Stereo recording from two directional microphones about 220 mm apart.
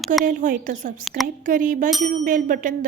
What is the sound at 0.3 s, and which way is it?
Speech, 35° right (ahead or behind).